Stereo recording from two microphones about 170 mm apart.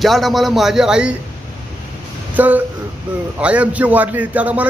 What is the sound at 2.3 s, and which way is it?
A man's voice, 10° right (ahead or behind).